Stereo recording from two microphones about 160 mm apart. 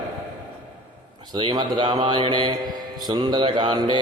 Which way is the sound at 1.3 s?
30° right (ahead or behind).